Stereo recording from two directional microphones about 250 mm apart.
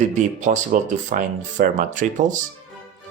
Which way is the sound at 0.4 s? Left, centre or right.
Right.